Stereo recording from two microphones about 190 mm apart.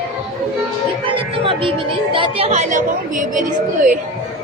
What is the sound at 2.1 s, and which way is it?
A woman's voice, 30° right (ahead or behind).